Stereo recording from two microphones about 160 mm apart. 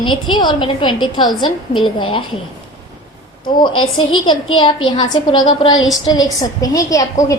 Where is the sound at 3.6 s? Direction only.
30° left (ahead or behind).